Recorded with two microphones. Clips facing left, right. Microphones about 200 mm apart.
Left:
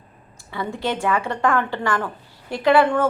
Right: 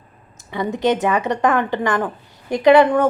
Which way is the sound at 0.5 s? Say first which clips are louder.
Right 7 dB; 20° right (ahead or behind).